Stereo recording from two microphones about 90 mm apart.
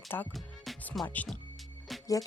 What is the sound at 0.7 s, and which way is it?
Music, centre (ahead or behind).